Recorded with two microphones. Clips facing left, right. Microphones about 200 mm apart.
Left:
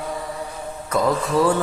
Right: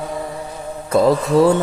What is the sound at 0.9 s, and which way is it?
Music, 30° right (ahead or behind).